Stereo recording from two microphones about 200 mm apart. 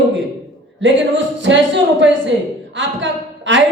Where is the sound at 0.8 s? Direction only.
65° right (ahead or behind).